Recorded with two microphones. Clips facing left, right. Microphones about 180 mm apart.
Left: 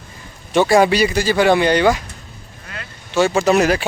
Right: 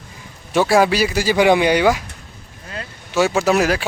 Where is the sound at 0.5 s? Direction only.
Centre (ahead or behind).